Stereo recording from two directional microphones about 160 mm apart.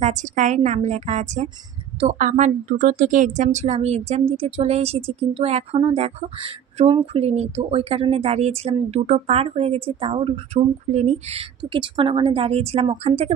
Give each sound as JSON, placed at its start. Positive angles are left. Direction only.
{"t": 0.0, "sound": "a woman's voice", "side_deg": -50}